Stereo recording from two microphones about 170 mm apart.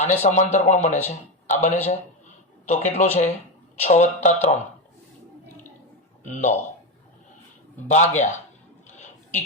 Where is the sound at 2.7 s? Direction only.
40° left (ahead or behind).